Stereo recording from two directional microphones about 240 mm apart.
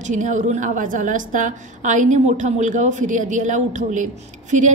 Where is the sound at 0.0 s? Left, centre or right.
Right.